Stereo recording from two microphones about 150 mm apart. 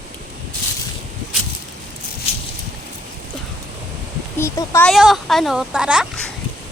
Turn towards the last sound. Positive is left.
turn(degrees=-5)  # may be behind; listen again after turning